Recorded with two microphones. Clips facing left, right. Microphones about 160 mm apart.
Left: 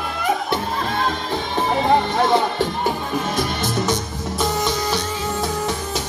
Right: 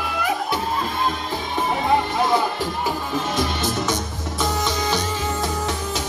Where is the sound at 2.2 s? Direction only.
25° left (ahead or behind).